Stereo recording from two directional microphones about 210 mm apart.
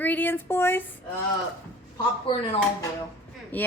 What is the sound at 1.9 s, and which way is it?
Speech, 20° left (ahead or behind).